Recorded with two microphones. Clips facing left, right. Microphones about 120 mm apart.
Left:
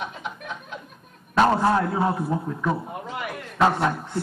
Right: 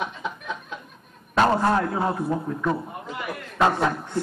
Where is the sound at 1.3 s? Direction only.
Centre (ahead or behind).